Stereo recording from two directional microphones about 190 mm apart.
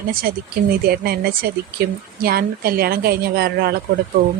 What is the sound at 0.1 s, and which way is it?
Speech, 50° right (ahead or behind).